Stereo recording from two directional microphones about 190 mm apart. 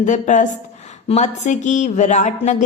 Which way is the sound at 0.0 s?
40° left (ahead or behind).